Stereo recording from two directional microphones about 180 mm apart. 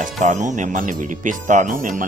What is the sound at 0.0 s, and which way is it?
Speech, 40° right (ahead or behind).